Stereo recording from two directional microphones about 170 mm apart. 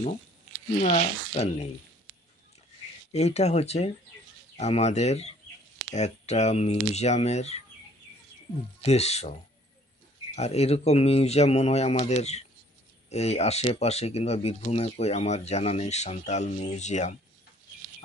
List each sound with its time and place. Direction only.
0.7 s speech: 45° left (ahead or behind)
3.1 s speech: 40° left (ahead or behind)
8.8 s speech: 40° left (ahead or behind)